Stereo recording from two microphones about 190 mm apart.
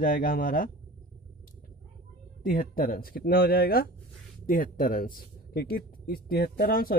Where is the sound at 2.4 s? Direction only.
45° left (ahead or behind).